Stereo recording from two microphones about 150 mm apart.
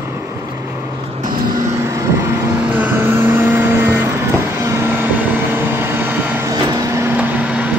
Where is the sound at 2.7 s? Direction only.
15° right (ahead or behind).